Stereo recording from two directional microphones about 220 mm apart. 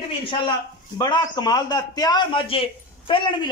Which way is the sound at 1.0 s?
20° left (ahead or behind).